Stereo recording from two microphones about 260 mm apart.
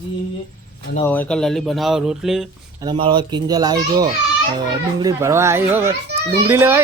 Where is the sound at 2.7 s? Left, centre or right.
Centre.